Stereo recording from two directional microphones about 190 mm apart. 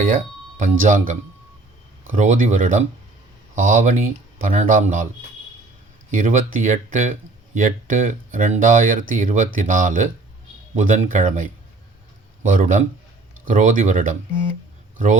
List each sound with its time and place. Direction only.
0.6 s speech: 40° right (ahead or behind)
2.1 s speech: 40° right (ahead or behind)
6.1 s a man's voice: 45° right (ahead or behind)